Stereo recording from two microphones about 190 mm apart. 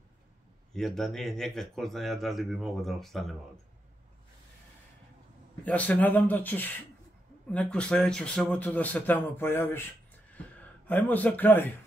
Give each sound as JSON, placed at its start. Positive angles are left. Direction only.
{"t": 0.7, "sound": "a man's voice", "side_deg": 0}
{"t": 5.7, "sound": "speech", "side_deg": 10}